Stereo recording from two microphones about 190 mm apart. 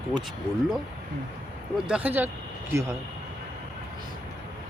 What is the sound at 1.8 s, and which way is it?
Speech, 5° right (ahead or behind).